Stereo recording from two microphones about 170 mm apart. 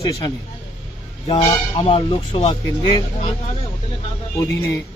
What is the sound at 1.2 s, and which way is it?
Speech, 30° left (ahead or behind).